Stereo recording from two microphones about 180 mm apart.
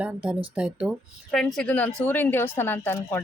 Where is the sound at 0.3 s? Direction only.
5° right (ahead or behind).